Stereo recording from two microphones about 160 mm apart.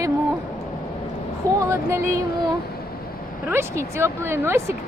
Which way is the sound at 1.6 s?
15° right (ahead or behind).